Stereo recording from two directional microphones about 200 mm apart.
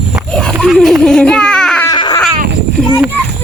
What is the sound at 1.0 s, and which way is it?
Baby cry, 5° left (ahead or behind).